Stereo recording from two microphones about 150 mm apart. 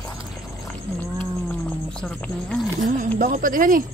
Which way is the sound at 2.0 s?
5° left (ahead or behind).